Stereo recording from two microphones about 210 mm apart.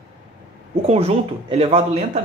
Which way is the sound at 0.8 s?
30° right (ahead or behind).